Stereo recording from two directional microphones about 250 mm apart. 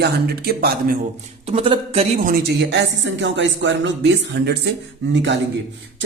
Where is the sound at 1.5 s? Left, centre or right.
Right.